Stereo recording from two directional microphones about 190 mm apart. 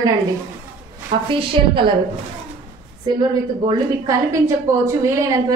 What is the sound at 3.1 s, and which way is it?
A woman's voice, 25° right (ahead or behind).